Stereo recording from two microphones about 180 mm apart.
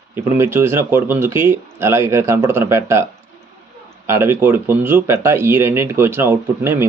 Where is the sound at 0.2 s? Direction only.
15° right (ahead or behind).